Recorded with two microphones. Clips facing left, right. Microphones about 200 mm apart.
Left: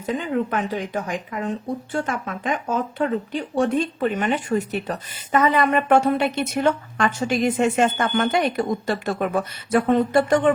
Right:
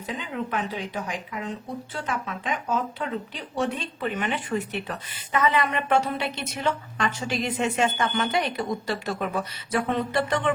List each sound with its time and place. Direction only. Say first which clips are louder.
0.0 s speech: left 8 dB; 50° left (ahead or behind)